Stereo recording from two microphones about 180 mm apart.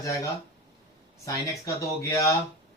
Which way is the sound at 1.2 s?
15° left (ahead or behind).